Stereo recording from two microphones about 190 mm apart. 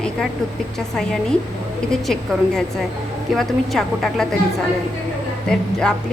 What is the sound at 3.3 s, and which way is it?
A woman's voice, centre (ahead or behind).